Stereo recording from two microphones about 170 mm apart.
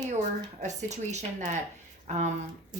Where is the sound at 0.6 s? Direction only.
45° right (ahead or behind).